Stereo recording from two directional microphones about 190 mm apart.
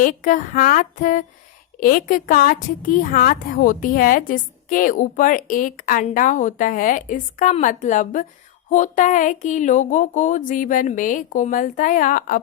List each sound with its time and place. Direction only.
0.0 s a woman's voice: 45° left (ahead or behind)